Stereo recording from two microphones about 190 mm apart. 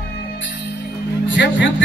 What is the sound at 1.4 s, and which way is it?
Music, 70° left (ahead or behind).